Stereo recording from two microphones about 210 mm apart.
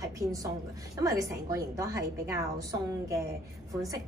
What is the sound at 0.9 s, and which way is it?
A woman's voice, 15° right (ahead or behind).